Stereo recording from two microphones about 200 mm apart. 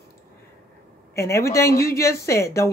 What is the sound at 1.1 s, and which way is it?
Speech, 15° left (ahead or behind).